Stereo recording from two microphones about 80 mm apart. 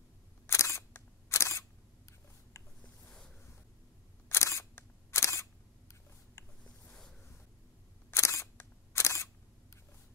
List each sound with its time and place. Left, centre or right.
0.5 s single-lens reflex camera: left
2.8 s a sound: centre
4.3 s single-lens reflex camera: left
8.1 s single-lens reflex camera: left